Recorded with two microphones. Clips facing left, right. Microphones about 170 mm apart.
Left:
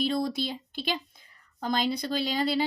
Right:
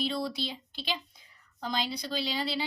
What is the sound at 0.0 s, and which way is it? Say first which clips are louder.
Speech: left 4 dB; 45° left (ahead or behind).